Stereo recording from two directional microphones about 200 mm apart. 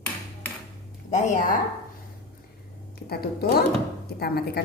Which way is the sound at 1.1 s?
40° left (ahead or behind).